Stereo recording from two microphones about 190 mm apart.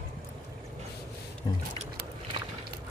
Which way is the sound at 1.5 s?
25° left (ahead or behind).